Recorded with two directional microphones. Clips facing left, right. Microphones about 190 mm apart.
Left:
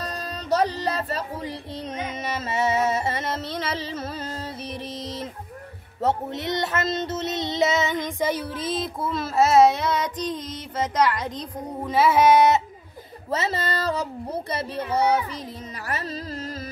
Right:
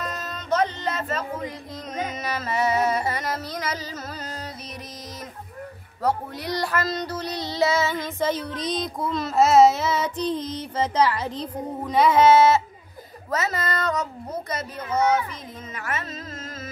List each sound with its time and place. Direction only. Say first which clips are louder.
0.0 s music: left 1 dB; 35° left (ahead or behind)
6.0 s child singing: left 1 dB; 25° left (ahead or behind)
13.3 s speech: even; 30° left (ahead or behind)